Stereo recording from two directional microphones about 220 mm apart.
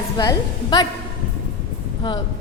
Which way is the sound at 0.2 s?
20° left (ahead or behind).